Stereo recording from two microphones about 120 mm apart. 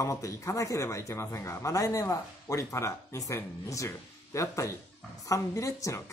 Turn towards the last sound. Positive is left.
turn(degrees=25)  # may be behind; listen again after turning